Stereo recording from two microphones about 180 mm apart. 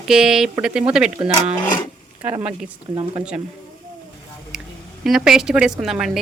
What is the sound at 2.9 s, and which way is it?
Speech, 25° right (ahead or behind).